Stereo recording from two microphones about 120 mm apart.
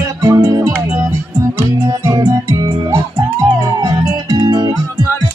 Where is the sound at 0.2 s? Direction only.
25° right (ahead or behind).